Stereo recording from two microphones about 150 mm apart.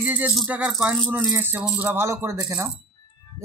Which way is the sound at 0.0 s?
10° right (ahead or behind).